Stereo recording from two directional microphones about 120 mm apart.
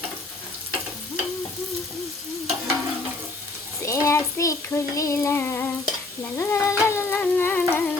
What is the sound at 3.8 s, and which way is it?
Frying, 25° left (ahead or behind).